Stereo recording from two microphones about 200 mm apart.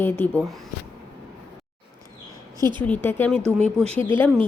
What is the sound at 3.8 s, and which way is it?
Speech, 30° right (ahead or behind).